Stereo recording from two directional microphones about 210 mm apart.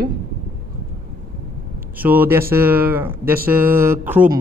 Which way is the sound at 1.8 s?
10° right (ahead or behind).